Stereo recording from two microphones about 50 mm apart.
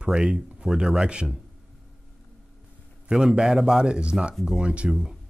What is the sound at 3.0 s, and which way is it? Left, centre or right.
Speech, centre.